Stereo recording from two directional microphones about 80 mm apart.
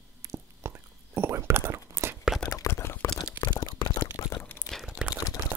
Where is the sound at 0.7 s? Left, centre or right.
Right.